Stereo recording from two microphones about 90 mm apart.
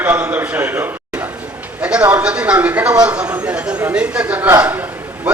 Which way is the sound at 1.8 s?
10° right (ahead or behind).